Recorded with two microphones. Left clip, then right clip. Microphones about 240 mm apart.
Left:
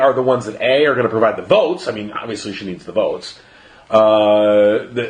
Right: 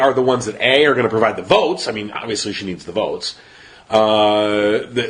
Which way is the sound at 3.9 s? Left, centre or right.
Right.